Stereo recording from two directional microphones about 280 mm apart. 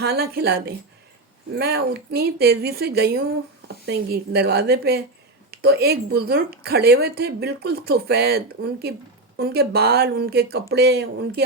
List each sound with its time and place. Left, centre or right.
0.0 s a woman's voice: right